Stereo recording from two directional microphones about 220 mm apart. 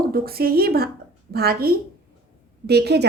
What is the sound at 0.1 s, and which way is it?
A woman's voice, 45° right (ahead or behind).